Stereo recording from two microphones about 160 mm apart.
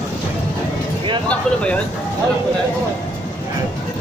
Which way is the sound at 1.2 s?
5° left (ahead or behind).